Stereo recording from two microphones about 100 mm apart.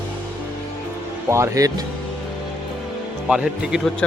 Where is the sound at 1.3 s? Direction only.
30° right (ahead or behind).